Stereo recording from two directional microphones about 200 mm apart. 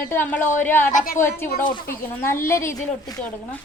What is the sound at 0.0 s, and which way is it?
A woman's voice, 10° left (ahead or behind).